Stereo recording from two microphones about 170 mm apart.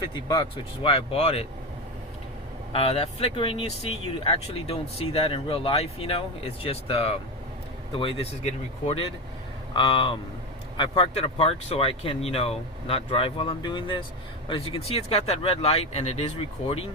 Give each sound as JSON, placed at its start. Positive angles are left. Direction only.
{"t": 0.0, "sound": "speech", "side_deg": 25}
{"t": 2.7, "sound": "speech", "side_deg": 35}